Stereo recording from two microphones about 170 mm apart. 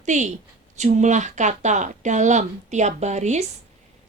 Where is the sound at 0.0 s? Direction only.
45° right (ahead or behind).